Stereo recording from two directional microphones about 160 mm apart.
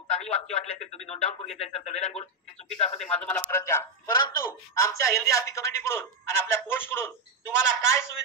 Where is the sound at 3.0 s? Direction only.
5° left (ahead or behind).